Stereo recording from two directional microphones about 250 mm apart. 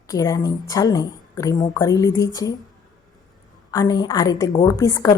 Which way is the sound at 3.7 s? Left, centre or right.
Centre.